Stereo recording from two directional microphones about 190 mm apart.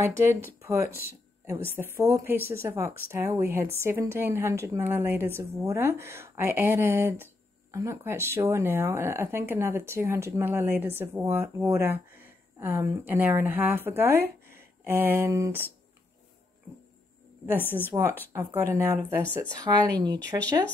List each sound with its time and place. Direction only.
0.0 s speech: 10° right (ahead or behind)
17.6 s a woman's voice: 10° left (ahead or behind)
18.3 s speech: 15° right (ahead or behind)